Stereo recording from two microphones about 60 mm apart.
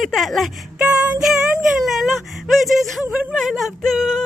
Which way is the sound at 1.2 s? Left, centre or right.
Centre.